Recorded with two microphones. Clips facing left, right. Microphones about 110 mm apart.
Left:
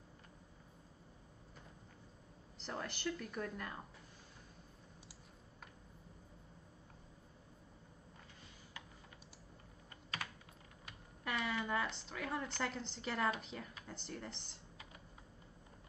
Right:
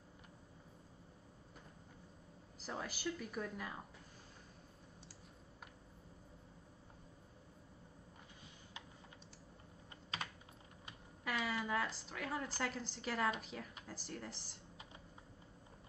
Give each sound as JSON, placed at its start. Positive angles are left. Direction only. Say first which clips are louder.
{"t": 2.6, "sound": "speech", "louder": "left 1 dB", "side_deg": -5}
{"t": 11.2, "sound": "a woman's voice", "louder": "even", "side_deg": 0}